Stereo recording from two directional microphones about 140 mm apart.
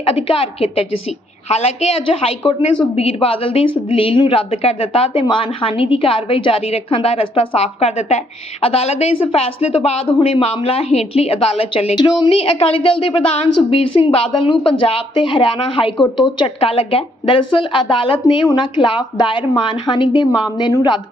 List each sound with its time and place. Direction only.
0.0 s a woman's voice: 40° left (ahead or behind)
11.9 s a woman's voice: 30° left (ahead or behind)